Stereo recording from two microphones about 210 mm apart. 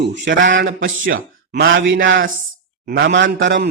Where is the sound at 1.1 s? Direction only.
45° right (ahead or behind).